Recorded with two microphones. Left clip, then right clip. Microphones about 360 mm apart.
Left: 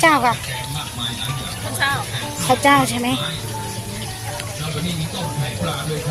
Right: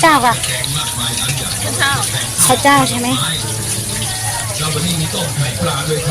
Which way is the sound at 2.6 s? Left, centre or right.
Left.